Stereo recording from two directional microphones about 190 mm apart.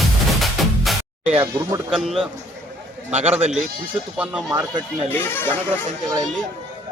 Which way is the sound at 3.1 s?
35° right (ahead or behind).